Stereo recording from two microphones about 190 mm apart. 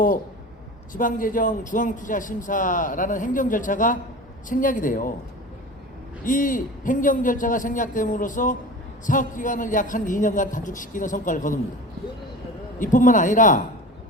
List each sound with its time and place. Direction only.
0.9 s speech: 45° left (ahead or behind)
6.2 s speech: 45° left (ahead or behind)
12.8 s speech: 45° left (ahead or behind)